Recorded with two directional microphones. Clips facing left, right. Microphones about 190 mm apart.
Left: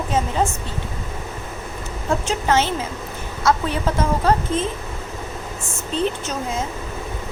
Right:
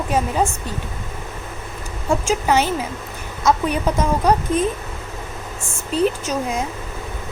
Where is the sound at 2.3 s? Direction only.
15° right (ahead or behind).